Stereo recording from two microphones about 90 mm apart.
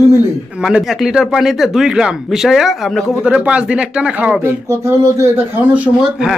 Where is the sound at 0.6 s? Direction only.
10° right (ahead or behind).